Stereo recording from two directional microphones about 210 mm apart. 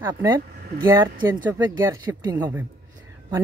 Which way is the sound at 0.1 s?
20° right (ahead or behind).